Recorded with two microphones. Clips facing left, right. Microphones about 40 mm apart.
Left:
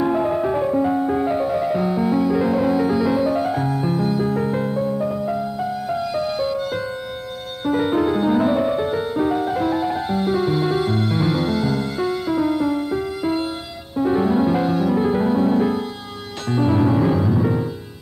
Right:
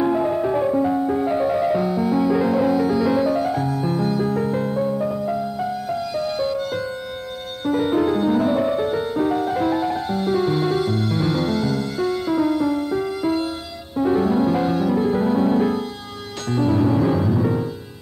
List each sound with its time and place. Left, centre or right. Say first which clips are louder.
0.0 s music: even; centre
1.3 s music: right 1 dB; centre
1.8 s music: left 1 dB; centre
2.1 s music: right 2 dB; centre; by 3.9 s left
3.9 s music: even; centre
4.7 s music: even; centre
5.9 s music: left 1 dB; centre
9.9 s music: left 1 dB; centre
10.8 s music: left 1 dB; left
13.9 s music: even; centre
14.2 s music: left 1 dB; centre
15.3 s music: even; centre
16.5 s music: left 1 dB; centre